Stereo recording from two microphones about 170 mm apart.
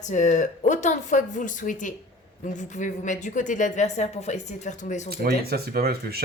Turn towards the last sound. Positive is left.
turn(degrees=-65)  # may be behind; listen again after turning